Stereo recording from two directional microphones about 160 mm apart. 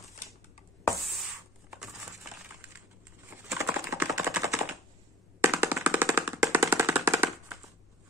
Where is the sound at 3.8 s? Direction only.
20° right (ahead or behind).